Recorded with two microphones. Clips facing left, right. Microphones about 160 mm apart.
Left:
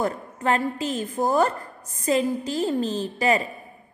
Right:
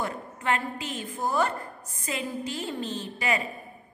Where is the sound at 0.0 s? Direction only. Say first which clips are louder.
Left 6 dB; 40° left (ahead or behind).